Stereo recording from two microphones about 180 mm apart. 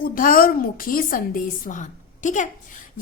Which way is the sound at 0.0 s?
50° left (ahead or behind).